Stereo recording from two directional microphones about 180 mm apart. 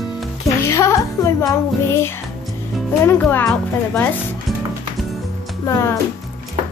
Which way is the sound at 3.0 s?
10° left (ahead or behind).